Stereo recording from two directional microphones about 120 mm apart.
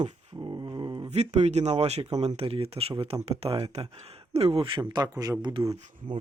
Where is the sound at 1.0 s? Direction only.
70° right (ahead or behind); by 4.8 s 50° right (ahead or behind).